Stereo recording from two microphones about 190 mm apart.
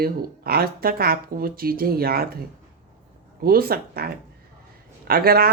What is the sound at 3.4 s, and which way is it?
Speech, 50° right (ahead or behind).